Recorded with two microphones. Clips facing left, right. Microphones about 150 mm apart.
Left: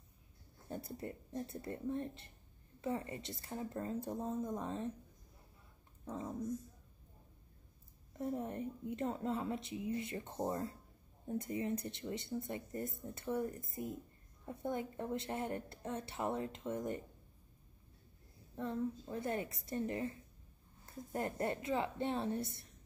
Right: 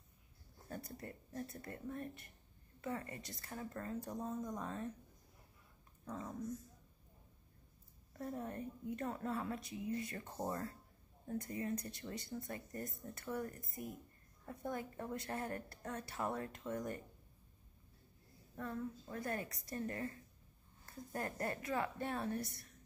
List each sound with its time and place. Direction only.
0.7 s speech: 25° left (ahead or behind)
6.0 s dog: 25° left (ahead or behind)
8.1 s speech: 20° left (ahead or behind)
18.6 s speech: 25° left (ahead or behind)